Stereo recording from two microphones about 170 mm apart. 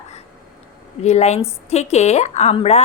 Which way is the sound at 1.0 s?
40° left (ahead or behind).